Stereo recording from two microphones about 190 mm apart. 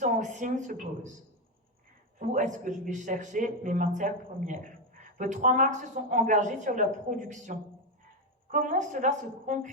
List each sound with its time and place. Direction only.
0.0 s a woman's voice: 40° right (ahead or behind)
2.1 s a man's voice: 40° right (ahead or behind)